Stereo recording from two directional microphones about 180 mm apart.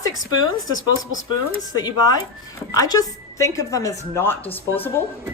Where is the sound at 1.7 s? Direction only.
20° left (ahead or behind).